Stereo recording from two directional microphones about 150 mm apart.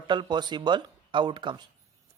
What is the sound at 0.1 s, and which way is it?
Speech, 30° right (ahead or behind).